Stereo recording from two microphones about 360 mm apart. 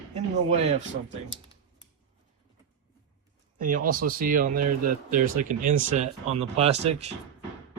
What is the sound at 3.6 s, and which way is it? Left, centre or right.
Speech, right.